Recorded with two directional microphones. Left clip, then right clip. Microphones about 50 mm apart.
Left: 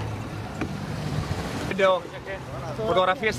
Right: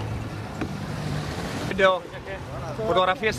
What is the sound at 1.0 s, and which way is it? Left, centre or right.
Boat, right.